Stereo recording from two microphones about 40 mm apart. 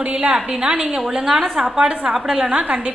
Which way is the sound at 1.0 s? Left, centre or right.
Centre.